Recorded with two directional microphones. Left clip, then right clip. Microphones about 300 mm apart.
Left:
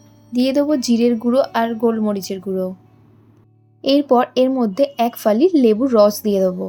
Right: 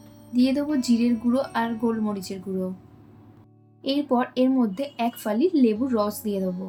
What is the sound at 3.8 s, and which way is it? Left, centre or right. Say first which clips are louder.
A woman's voice: left 10 dB; left.